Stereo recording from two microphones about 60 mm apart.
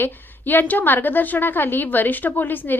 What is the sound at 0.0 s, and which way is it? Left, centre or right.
A woman's voice, left.